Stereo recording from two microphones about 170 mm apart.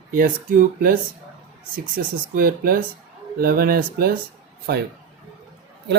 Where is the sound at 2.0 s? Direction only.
60° right (ahead or behind).